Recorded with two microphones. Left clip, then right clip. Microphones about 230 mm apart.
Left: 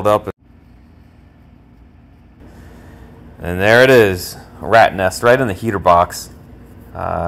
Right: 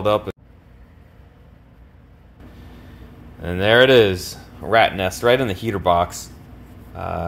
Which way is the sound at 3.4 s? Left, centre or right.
Centre.